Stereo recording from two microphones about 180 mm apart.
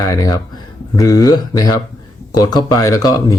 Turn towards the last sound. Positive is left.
turn(degrees=20)  # may be behind; listen again after turning